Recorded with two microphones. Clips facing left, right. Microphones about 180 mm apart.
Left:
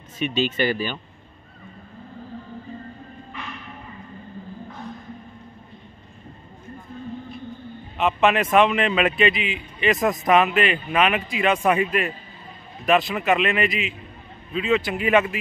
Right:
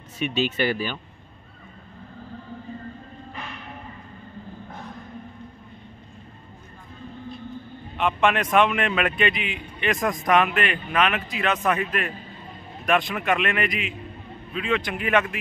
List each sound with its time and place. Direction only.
0.2 s speech: 10° right (ahead or behind)
8.0 s a man's voice: 5° left (ahead or behind)
13.7 s a man's voice: 50° right (ahead or behind)
14.5 s speech: 5° left (ahead or behind)